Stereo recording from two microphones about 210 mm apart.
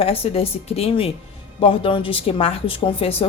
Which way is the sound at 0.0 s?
25° left (ahead or behind).